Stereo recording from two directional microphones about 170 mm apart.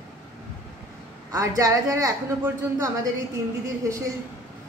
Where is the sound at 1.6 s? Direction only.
20° right (ahead or behind).